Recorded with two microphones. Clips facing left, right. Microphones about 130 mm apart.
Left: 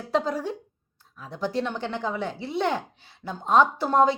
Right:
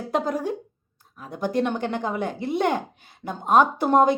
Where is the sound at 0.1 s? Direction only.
50° right (ahead or behind).